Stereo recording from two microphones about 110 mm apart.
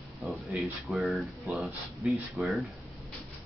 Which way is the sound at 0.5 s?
15° right (ahead or behind).